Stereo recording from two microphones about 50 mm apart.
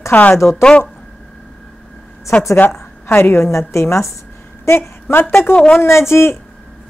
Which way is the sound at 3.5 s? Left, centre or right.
Left.